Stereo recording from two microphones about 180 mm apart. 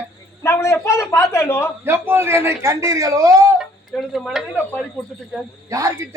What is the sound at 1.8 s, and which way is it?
A man's voice, 10° right (ahead or behind).